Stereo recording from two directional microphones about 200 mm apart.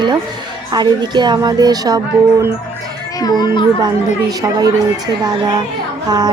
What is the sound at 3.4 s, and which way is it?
Speech, 25° left (ahead or behind).